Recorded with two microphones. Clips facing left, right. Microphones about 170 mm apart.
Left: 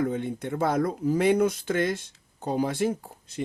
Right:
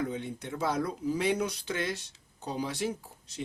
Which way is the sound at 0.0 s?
50° left (ahead or behind).